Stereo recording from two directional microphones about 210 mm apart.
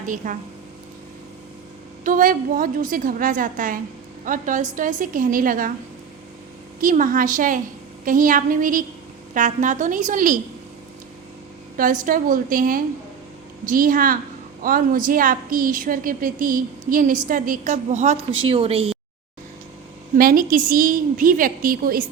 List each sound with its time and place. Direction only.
0.0 s a woman's voice: 40° right (ahead or behind)
2.0 s a woman's voice: 40° right (ahead or behind)
6.8 s a woman's voice: 40° right (ahead or behind)
12.0 s a woman's voice: 40° right (ahead or behind)
20.1 s a woman's voice: 40° right (ahead or behind)